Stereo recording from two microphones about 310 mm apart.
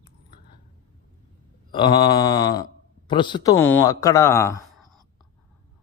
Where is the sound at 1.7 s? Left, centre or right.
Centre.